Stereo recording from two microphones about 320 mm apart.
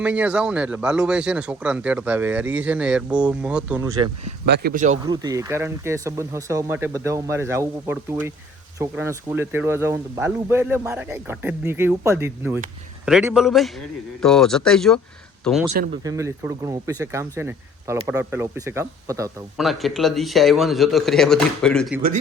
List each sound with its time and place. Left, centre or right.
0.0 s speech: centre
4.4 s speech: right
5.0 s speech: centre